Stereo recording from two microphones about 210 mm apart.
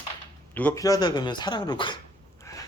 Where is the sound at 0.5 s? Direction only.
10° left (ahead or behind).